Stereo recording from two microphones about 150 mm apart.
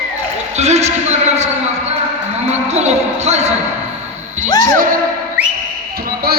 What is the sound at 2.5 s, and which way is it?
Music, 50° right (ahead or behind).